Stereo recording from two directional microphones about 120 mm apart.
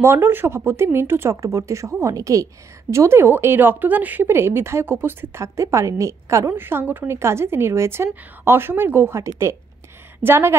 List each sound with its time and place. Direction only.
0.0 s speech: 20° right (ahead or behind)